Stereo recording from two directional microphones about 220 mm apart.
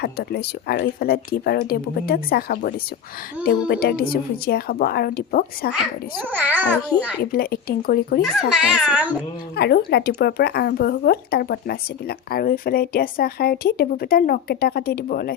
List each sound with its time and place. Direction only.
0.0 s speech: 45° left (ahead or behind)
6.3 s a child's voice: 10° right (ahead or behind)
7.2 s speech: 45° left (ahead or behind)
8.2 s a child's voice: centre (ahead or behind)
9.6 s speech: 50° left (ahead or behind)